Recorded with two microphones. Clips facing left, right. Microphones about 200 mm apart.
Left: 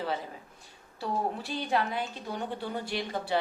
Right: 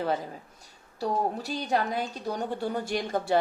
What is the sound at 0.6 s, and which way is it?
A woman's voice, 40° right (ahead or behind).